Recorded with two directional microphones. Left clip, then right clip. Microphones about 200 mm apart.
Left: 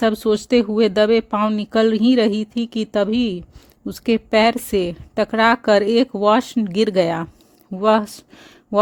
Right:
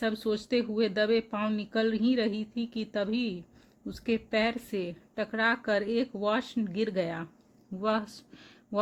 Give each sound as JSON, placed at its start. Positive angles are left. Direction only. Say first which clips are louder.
{"t": 0.0, "sound": "speech", "louder": "left 13 dB", "side_deg": 45}